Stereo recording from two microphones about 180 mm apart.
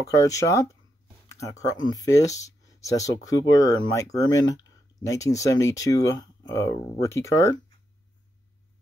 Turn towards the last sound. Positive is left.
turn(degrees=15)  # may be behind; listen again after turning